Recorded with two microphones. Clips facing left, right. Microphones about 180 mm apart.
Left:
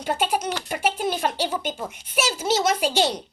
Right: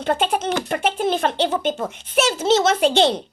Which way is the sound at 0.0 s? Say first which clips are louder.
Right 3 dB; 10° left (ahead or behind).